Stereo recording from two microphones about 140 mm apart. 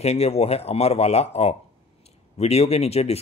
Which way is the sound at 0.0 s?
50° left (ahead or behind).